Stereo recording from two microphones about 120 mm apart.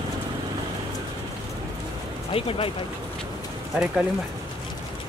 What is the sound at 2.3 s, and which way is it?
Speech, 50° left (ahead or behind).